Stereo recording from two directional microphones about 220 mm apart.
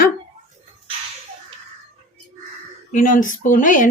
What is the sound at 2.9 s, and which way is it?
Speech, 35° left (ahead or behind).